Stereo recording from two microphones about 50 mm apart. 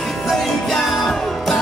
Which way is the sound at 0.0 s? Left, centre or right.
Centre.